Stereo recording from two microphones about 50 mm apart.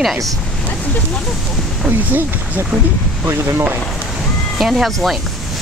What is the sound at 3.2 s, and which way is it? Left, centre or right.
Speech, right.